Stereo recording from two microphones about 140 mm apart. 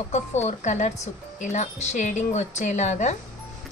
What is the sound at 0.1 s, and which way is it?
A woman's voice, 55° left (ahead or behind).